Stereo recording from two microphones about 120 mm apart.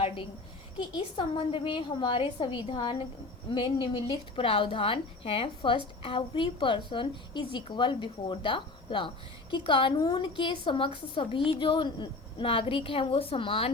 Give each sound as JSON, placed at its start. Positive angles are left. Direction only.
{"t": 0.8, "sound": "a woman's voice", "side_deg": 45}